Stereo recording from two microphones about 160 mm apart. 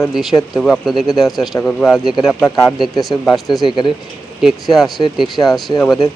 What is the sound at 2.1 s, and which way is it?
Speech, 15° left (ahead or behind).